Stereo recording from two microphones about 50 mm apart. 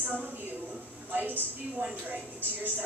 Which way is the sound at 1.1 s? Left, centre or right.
Right.